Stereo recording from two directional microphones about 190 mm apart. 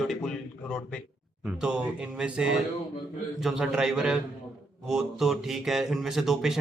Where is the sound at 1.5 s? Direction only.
5° right (ahead or behind).